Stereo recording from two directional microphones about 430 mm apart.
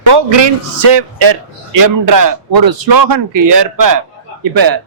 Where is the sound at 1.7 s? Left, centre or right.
Right.